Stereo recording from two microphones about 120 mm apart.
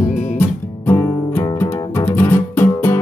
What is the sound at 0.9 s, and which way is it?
Music, 20° left (ahead or behind).